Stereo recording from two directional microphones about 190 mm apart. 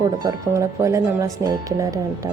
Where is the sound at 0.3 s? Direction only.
15° right (ahead or behind).